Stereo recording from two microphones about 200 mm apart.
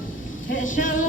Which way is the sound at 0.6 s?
40° left (ahead or behind).